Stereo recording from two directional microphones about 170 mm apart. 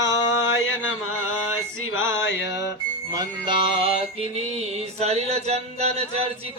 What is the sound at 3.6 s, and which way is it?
Mantra, 35° right (ahead or behind).